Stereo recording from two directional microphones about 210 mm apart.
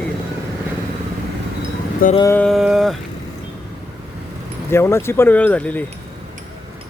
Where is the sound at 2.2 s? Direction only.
10° left (ahead or behind).